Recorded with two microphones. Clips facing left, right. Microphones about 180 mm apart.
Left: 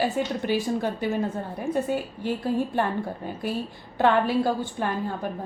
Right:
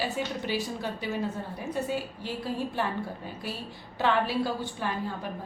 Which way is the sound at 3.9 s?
50° left (ahead or behind).